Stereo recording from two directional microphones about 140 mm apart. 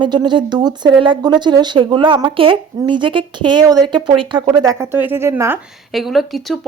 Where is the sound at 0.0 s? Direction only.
30° right (ahead or behind); by 5.5 s 15° right (ahead or behind).